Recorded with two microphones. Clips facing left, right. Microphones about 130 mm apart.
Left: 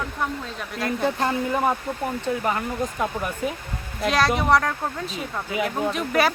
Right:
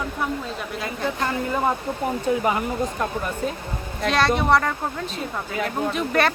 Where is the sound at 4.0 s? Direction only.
Centre (ahead or behind).